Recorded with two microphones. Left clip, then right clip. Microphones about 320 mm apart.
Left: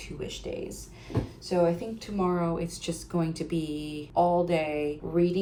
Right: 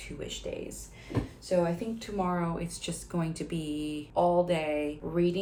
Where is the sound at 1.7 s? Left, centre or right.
Centre.